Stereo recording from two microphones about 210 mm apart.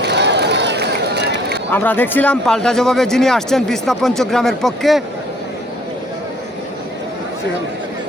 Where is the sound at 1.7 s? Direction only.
10° left (ahead or behind).